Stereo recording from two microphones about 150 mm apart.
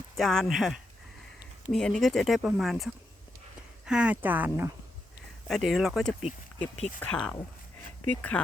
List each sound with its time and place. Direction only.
0.2 s speech: centre (ahead or behind)
5.5 s speech: centre (ahead or behind)